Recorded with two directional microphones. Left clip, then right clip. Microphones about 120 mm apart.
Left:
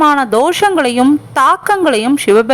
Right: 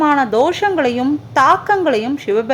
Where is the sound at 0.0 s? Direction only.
40° left (ahead or behind).